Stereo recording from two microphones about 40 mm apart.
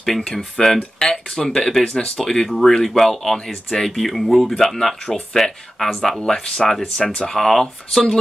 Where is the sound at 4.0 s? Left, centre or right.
Centre.